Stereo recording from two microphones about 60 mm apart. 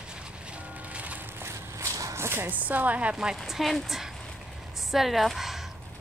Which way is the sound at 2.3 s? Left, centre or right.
Right.